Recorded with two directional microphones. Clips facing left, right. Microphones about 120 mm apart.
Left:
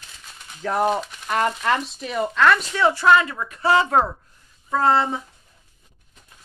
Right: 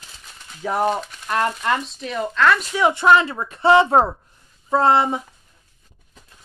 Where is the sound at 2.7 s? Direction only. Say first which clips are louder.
Right 1 dB; 20° right (ahead or behind).